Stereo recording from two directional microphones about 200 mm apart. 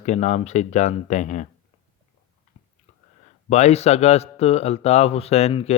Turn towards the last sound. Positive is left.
turn(degrees=30)  # may be behind; listen again after turning